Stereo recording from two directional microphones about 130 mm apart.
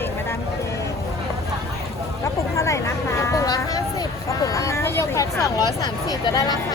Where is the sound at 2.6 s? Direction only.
20° left (ahead or behind).